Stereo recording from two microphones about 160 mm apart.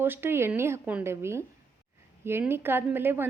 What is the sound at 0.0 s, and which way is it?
A woman's voice, 15° right (ahead or behind).